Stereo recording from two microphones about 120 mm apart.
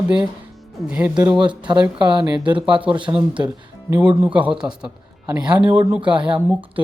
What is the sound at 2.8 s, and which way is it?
Speech, 45° right (ahead or behind).